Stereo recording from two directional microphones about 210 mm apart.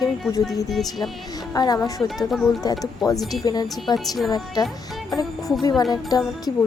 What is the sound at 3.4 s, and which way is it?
Speech, 20° left (ahead or behind).